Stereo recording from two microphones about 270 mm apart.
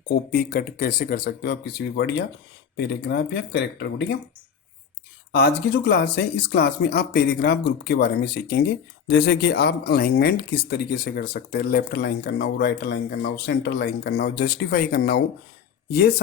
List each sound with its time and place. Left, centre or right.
0.1 s speech: left
5.3 s speech: left